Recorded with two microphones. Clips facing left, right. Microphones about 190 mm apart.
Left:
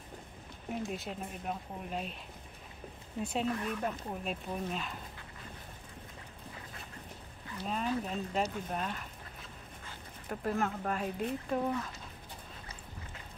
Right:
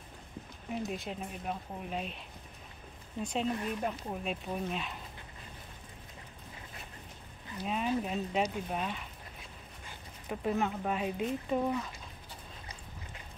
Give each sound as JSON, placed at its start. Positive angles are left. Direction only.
{"t": 0.7, "sound": "speech", "side_deg": 0}
{"t": 3.2, "sound": "speech", "side_deg": 5}
{"t": 3.4, "sound": "speech", "side_deg": -20}
{"t": 3.8, "sound": "speech", "side_deg": 0}
{"t": 7.5, "sound": "speech", "side_deg": -10}
{"t": 10.2, "sound": "speech", "side_deg": -5}